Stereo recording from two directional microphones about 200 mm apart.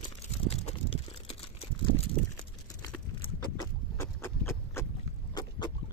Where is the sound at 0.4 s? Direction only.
30° left (ahead or behind).